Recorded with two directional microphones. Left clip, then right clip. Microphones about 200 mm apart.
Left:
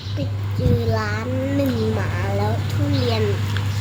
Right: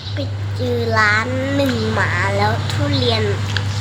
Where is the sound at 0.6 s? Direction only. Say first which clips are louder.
Right 7 dB; 5° right (ahead or behind).